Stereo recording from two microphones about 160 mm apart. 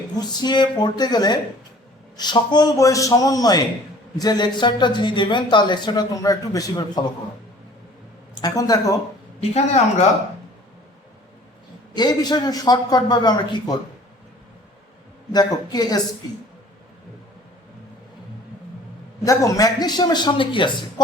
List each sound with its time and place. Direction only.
0.2 s speech: 25° left (ahead or behind)
8.4 s speech: 25° left (ahead or behind)
9.4 s speech: 40° left (ahead or behind)
11.9 s speech: 25° left (ahead or behind)
15.3 s speech: 25° left (ahead or behind)
19.2 s speech: 20° left (ahead or behind)